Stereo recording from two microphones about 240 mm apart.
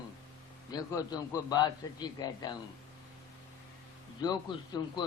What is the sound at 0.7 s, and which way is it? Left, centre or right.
A man's voice, centre.